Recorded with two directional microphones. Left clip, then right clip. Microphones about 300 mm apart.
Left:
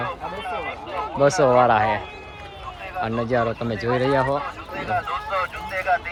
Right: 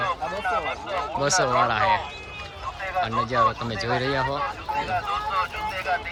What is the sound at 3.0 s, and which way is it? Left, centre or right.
Speech, centre.